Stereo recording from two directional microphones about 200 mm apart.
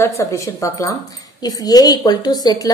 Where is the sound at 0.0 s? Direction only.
15° left (ahead or behind).